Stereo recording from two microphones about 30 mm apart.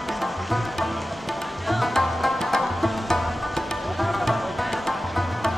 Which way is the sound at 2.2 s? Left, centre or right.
Centre.